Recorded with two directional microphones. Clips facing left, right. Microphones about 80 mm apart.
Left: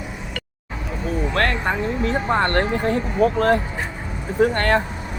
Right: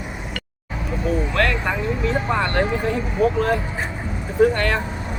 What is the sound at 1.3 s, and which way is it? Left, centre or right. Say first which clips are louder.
Speech: even; left.